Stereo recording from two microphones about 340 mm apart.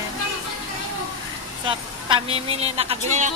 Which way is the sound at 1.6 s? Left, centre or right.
Centre.